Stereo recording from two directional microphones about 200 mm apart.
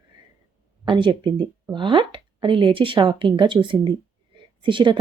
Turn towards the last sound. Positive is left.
turn(degrees=-25)  # may be behind; listen again after turning